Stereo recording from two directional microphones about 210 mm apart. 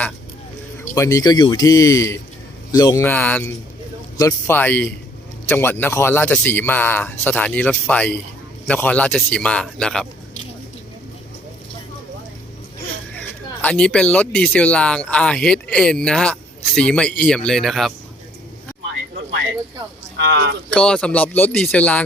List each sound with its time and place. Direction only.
0.9 s a man's voice: 15° left (ahead or behind)
13.1 s speech: 5° left (ahead or behind)
20.2 s speech: 55° right (ahead or behind)
20.7 s speech: 5° left (ahead or behind)